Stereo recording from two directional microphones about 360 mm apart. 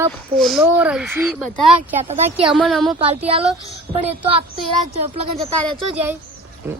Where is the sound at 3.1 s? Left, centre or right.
Centre.